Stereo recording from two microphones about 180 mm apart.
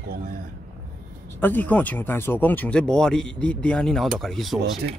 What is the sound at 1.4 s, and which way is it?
Speech, 10° left (ahead or behind).